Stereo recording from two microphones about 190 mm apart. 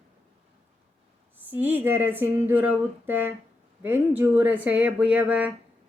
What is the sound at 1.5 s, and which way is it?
Speech, 10° right (ahead or behind).